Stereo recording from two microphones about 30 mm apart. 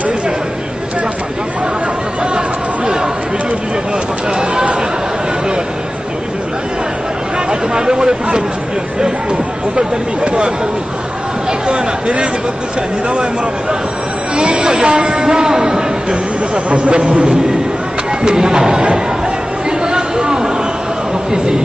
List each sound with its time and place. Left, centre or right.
2.3 s chatter: right
7.7 s a sound: right
10.2 s a sound: right
14.3 s speech: right
14.6 s speech: right
15.3 s a man's voice: centre
16.5 s speech: right
18.2 s speech: right
19.8 s a sound: right